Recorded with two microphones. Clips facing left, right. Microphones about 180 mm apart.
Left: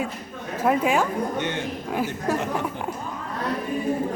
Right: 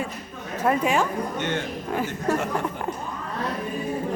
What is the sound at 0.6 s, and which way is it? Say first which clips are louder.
A woman's voice: left 1 dB; 10° left (ahead or behind).